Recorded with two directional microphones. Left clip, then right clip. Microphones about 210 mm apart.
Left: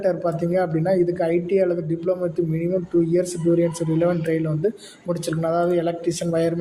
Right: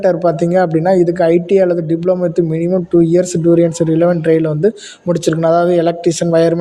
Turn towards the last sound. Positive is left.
turn(degrees=-35)  # may be behind; listen again after turning